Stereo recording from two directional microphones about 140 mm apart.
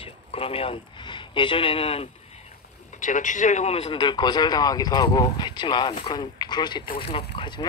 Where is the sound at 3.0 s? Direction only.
65° left (ahead or behind); by 3.9 s 50° left (ahead or behind).